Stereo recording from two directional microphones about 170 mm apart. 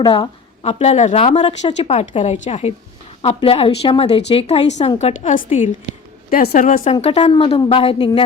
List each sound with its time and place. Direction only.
0.1 s a woman's voice: 35° left (ahead or behind)
6.3 s a woman's voice: 60° left (ahead or behind); by 8.2 s 30° left (ahead or behind)